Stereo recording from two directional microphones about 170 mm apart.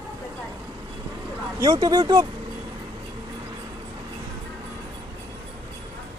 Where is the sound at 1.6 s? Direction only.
20° right (ahead or behind).